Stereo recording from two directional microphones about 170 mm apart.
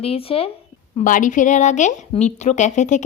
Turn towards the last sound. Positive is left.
turn(degrees=45)  # may be behind; listen again after turning